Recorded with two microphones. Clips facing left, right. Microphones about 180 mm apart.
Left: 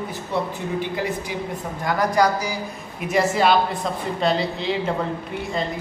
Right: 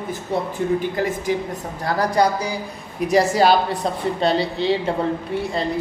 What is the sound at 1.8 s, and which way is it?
A man's voice, 30° right (ahead or behind).